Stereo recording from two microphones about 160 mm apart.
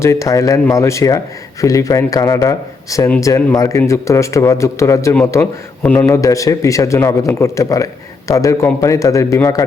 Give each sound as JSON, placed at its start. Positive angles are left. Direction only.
{"t": 0.0, "sound": "a man's voice", "side_deg": 20}
{"t": 6.1, "sound": "speech", "side_deg": 20}